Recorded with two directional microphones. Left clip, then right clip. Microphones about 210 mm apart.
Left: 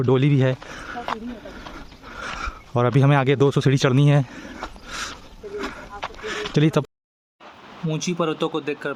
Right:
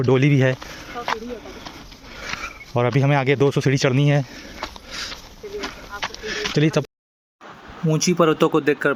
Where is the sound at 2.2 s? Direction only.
30° left (ahead or behind).